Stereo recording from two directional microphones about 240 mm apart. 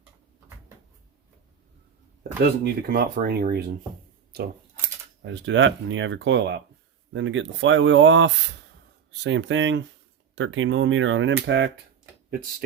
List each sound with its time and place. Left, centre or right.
2.4 s speech: right
5.2 s speech: right
12.3 s speech: right